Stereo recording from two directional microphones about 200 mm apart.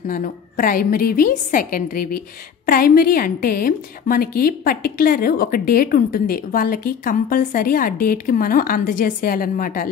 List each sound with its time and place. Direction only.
0.0 s a woman's voice: 45° left (ahead or behind)